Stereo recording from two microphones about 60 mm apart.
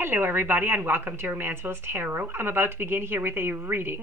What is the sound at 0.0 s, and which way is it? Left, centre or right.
A woman's voice, right.